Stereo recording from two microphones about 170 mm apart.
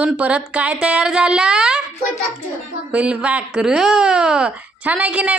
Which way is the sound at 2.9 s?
5° right (ahead or behind).